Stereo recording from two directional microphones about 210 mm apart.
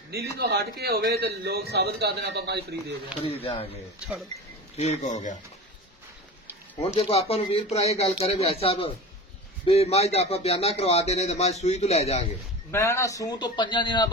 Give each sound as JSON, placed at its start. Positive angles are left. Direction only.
{"t": 0.4, "sound": "a man's voice", "side_deg": -50}
{"t": 3.2, "sound": "a man's voice", "side_deg": 30}
{"t": 7.0, "sound": "a man's voice", "side_deg": 30}
{"t": 12.7, "sound": "a man's voice", "side_deg": 15}